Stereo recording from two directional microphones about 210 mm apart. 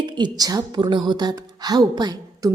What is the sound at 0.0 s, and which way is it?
A woman's voice, 20° right (ahead or behind).